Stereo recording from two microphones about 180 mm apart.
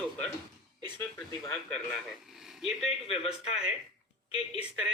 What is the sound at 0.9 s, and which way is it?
Speech, 10° left (ahead or behind).